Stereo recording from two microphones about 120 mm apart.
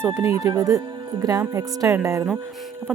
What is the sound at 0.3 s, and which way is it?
Speech, 30° right (ahead or behind).